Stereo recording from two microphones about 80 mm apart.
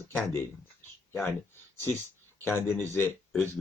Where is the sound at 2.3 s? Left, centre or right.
Left.